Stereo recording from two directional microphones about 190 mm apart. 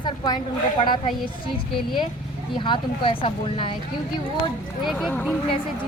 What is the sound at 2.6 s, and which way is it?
Speech, 25° left (ahead or behind).